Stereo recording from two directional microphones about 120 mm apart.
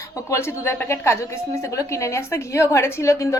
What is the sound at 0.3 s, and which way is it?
A woman's voice, 20° left (ahead or behind).